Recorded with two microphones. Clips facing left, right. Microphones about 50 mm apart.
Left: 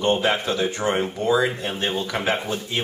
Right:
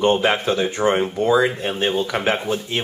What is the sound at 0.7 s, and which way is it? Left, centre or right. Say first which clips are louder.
Speech: right 5 dB; right.